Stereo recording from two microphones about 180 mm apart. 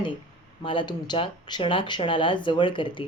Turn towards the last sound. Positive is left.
turn(degrees=30)  # may be behind; listen again after turning